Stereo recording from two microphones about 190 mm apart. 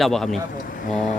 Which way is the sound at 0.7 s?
40° left (ahead or behind).